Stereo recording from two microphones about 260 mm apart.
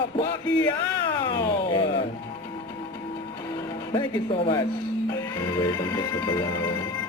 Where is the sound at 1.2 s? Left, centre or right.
Centre.